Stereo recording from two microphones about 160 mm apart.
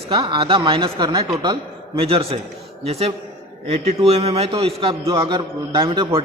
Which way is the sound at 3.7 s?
40° right (ahead or behind).